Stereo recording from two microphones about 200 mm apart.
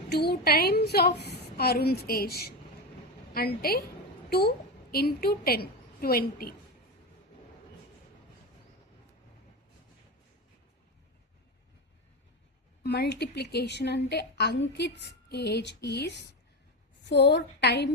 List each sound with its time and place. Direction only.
0.1 s a woman's voice: 55° left (ahead or behind)
12.8 s a woman's voice: 55° left (ahead or behind)